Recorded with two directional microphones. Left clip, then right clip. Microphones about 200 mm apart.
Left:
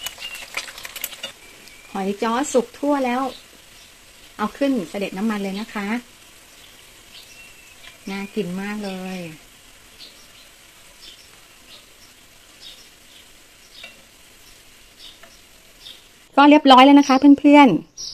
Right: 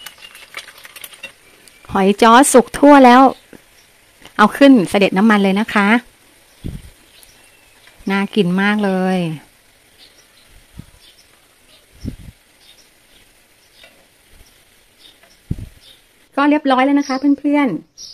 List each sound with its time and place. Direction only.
1.9 s speech: 50° right (ahead or behind)
4.4 s speech: 55° right (ahead or behind)
8.0 s speech: 50° right (ahead or behind)
16.3 s speech: 5° left (ahead or behind)